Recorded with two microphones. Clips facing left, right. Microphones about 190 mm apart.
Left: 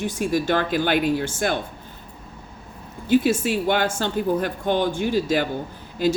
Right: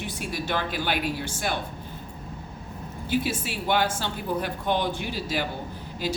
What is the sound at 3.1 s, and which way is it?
Speech, 50° left (ahead or behind).